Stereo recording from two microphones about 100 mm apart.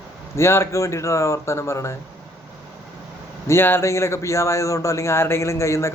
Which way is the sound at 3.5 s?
20° left (ahead or behind).